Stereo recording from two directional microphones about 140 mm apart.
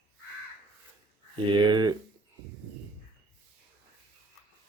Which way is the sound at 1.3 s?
35° right (ahead or behind).